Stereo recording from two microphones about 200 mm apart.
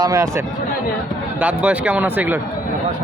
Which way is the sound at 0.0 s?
15° right (ahead or behind).